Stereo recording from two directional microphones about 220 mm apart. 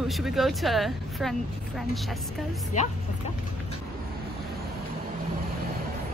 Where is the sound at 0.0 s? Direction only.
Centre (ahead or behind).